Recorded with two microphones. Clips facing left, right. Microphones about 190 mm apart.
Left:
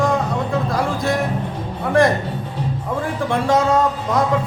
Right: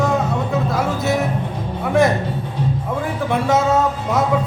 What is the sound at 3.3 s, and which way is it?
Speech, 5° right (ahead or behind).